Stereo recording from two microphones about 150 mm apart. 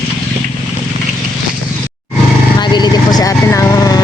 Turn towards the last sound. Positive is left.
turn(degrees=20)  # may be behind; listen again after turning